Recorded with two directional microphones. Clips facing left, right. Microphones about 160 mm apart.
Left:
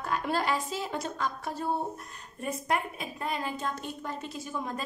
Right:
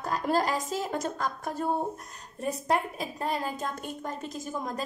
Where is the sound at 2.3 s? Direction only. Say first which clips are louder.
Right 3 dB; 35° right (ahead or behind).